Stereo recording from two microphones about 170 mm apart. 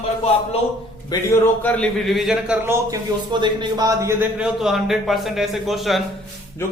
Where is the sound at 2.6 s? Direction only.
15° right (ahead or behind).